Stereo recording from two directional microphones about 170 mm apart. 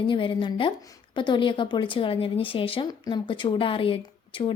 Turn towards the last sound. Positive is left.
turn(degrees=30)  # may be behind; listen again after turning